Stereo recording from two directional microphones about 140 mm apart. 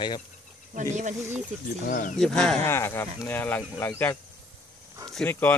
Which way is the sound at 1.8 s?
75° left (ahead or behind).